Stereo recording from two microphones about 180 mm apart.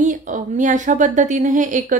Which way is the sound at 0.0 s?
45° right (ahead or behind).